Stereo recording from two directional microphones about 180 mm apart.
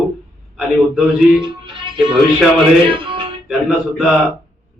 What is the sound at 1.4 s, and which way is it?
Speech, 30° right (ahead or behind).